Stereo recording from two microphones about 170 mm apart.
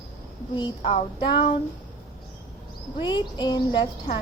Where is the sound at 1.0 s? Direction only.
30° left (ahead or behind).